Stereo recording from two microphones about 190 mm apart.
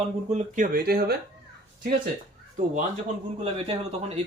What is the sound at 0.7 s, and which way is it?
Speech, 55° right (ahead or behind).